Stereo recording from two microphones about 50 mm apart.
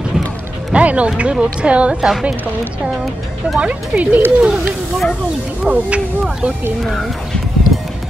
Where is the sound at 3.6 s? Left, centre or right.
Right.